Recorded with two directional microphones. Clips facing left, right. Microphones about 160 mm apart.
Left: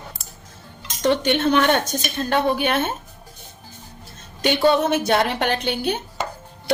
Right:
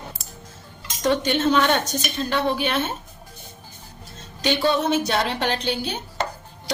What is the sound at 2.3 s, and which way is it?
Speech, 55° left (ahead or behind).